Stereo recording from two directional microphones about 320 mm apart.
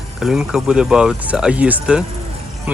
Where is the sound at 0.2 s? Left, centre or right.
Centre.